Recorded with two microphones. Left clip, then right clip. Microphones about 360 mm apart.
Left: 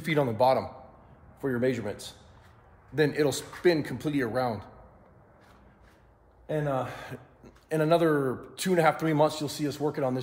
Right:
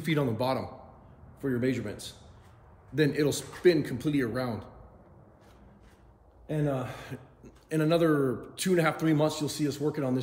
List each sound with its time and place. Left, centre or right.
0.0 s a man's voice: centre
6.4 s speech: centre